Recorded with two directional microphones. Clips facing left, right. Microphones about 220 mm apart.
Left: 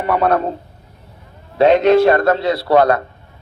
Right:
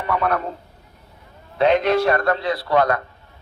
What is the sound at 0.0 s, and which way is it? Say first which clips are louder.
Speech: left 6 dB; 30° left (ahead or behind).